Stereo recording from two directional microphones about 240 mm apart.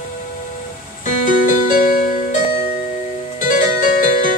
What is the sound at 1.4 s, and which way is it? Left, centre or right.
Music, left.